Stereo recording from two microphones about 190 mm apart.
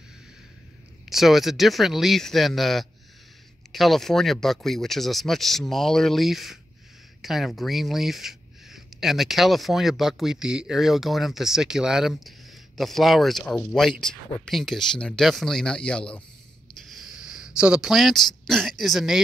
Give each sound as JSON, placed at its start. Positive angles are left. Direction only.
{"t": 1.0, "sound": "speech", "side_deg": 0}